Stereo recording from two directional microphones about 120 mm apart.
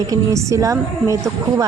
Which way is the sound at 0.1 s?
30° right (ahead or behind).